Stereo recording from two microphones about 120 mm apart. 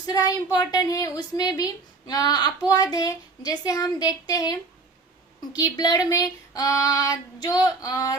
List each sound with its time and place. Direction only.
0.5 s a woman's voice: 30° left (ahead or behind)
5.5 s a woman's voice: 35° left (ahead or behind)